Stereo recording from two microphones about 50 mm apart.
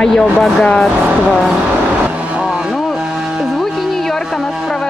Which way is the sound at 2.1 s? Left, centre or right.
Right.